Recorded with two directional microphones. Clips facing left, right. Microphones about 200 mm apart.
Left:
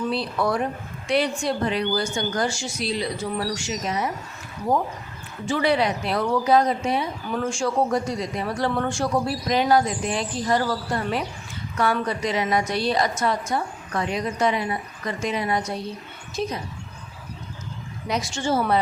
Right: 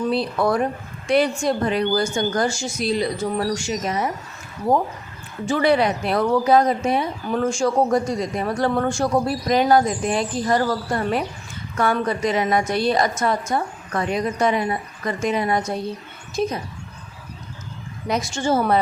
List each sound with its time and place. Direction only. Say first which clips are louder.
0.1 s speech: right 4 dB; 50° right (ahead or behind)
5.5 s speech: right 3 dB; 50° right (ahead or behind)
18.1 s speech: right 3 dB; 45° right (ahead or behind)